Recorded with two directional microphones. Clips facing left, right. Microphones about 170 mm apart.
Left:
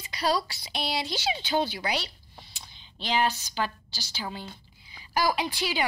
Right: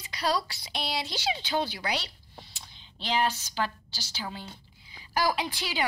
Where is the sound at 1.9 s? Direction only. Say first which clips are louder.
Left 2 dB; centre (ahead or behind).